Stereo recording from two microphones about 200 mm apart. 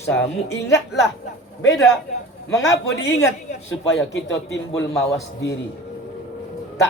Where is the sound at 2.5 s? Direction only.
15° left (ahead or behind).